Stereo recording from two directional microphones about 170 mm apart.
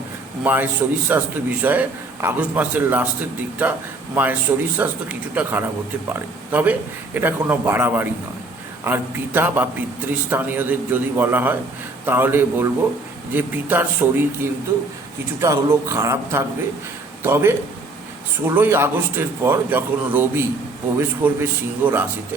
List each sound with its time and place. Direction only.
0.4 s a man's voice: 10° right (ahead or behind)